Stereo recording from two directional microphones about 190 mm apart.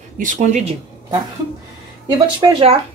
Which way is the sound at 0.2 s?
40° right (ahead or behind).